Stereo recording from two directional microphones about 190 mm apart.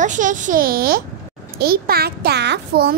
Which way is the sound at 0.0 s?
40° right (ahead or behind).